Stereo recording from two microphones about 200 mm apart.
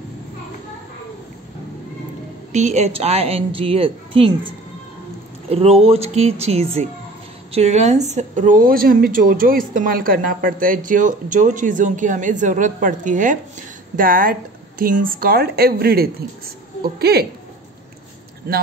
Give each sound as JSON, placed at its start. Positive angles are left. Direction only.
{"t": 2.5, "sound": "a woman's voice", "side_deg": -35}
{"t": 5.5, "sound": "a woman's voice", "side_deg": -30}
{"t": 18.4, "sound": "speech", "side_deg": -45}